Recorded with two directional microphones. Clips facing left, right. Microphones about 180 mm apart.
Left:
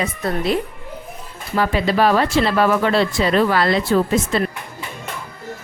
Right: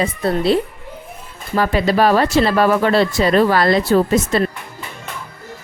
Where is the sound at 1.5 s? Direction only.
45° right (ahead or behind).